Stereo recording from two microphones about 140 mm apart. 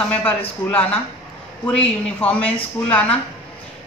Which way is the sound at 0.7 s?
10° left (ahead or behind).